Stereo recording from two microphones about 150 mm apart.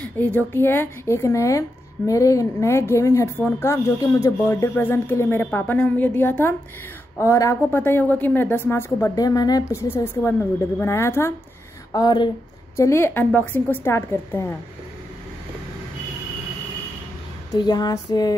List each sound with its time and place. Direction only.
0.0 s speech: 10° left (ahead or behind)
11.9 s music: 25° left (ahead or behind)
12.7 s speech: 20° left (ahead or behind)
17.6 s music: 25° left (ahead or behind)